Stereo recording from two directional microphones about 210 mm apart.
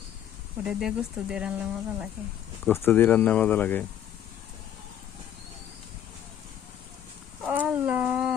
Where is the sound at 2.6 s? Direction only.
10° left (ahead or behind).